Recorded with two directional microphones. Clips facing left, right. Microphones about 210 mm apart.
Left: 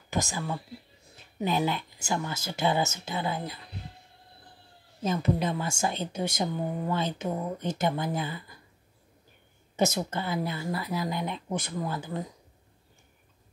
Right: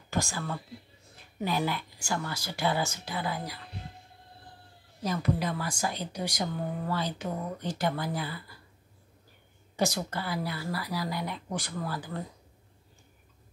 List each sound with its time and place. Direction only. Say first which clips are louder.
0.1 s speech: left 1 dB; 20° left (ahead or behind)
5.0 s speech: left 2 dB; 25° left (ahead or behind)
9.8 s speech: left 3 dB; 20° left (ahead or behind)